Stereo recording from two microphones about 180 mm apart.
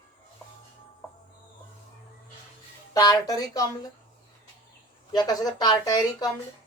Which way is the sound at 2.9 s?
20° left (ahead or behind).